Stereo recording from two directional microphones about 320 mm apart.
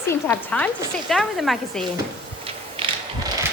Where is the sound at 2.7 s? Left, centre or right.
Centre.